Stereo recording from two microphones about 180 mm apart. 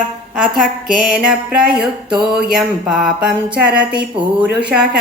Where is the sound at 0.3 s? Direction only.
5° right (ahead or behind).